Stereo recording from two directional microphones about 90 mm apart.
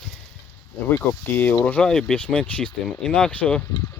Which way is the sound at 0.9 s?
25° left (ahead or behind).